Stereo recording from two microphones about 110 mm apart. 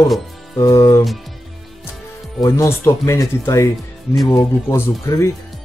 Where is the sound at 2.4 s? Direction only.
30° left (ahead or behind).